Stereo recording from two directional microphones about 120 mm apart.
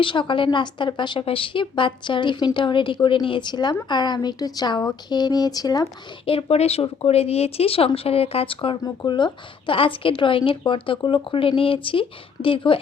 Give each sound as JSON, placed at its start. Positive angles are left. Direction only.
{"t": 0.0, "sound": "speech", "side_deg": 45}
{"t": 6.2, "sound": "speech", "side_deg": 55}
{"t": 8.8, "sound": "speech", "side_deg": 35}